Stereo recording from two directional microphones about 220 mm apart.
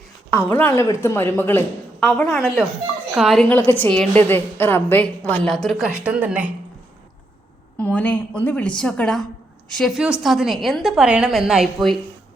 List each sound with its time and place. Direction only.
0.3 s a woman's voice: 10° left (ahead or behind); by 6.5 s 5° right (ahead or behind)
7.8 s a woman's voice: 5° left (ahead or behind)